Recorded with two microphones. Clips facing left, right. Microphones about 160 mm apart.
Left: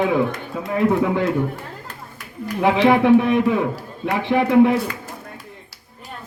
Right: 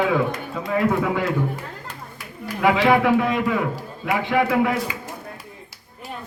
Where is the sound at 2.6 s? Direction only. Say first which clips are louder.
Left 2 dB; 20° left (ahead or behind).